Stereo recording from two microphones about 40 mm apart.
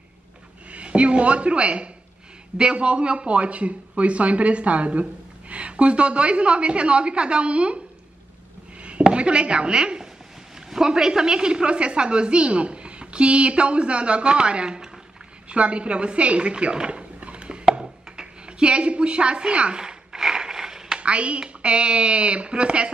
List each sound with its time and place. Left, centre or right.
0.7 s a woman's voice: right
9.0 s a woman's voice: right
16.7 s a sound: right
21.0 s a woman's voice: right